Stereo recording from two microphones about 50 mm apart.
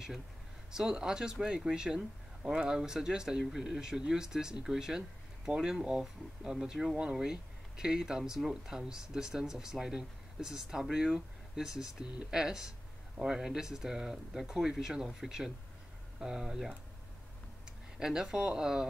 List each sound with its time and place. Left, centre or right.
0.7 s speech: centre
17.9 s speech: centre